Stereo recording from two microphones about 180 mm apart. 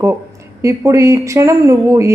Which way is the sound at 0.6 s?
15° right (ahead or behind).